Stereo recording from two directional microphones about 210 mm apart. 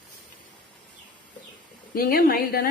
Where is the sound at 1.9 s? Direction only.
45° left (ahead or behind).